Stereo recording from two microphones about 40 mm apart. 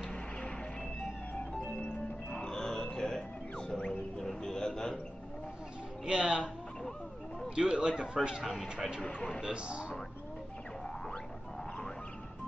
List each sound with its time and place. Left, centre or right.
2.3 s music: centre
4.2 s a sound: centre
6.0 s music: right
7.4 s speech: right